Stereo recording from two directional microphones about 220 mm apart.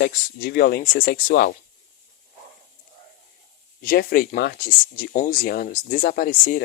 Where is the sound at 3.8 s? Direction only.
40° left (ahead or behind).